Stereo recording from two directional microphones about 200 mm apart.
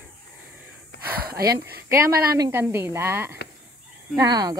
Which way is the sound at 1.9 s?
15° right (ahead or behind).